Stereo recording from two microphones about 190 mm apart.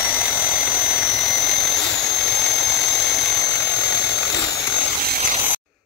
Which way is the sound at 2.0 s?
60° left (ahead or behind).